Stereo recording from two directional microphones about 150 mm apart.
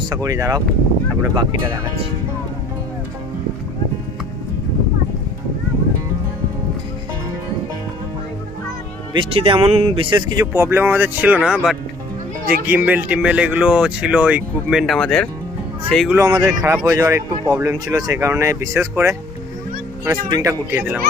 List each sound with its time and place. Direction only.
0.1 s speech: 25° right (ahead or behind)
1.6 s speech: 20° right (ahead or behind)
9.1 s speech: 35° right (ahead or behind)
10.4 s speech: 15° right (ahead or behind); by 15.3 s 5° left (ahead or behind)
16.0 s speech: 20° right (ahead or behind)
20.2 s speech: 25° right (ahead or behind)